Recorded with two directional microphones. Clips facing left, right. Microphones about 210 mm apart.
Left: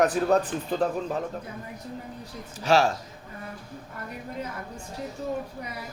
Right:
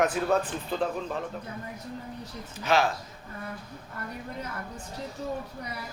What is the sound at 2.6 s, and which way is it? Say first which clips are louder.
Speech: left 3 dB; 40° left (ahead or behind).